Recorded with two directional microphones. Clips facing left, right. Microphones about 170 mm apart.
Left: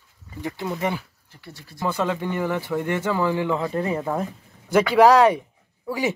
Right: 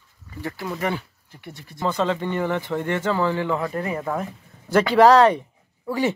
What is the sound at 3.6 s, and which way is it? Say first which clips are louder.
Speech: left 2 dB; 25° left (ahead or behind).